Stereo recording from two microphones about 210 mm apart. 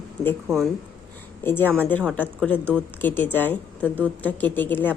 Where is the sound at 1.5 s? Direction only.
10° left (ahead or behind).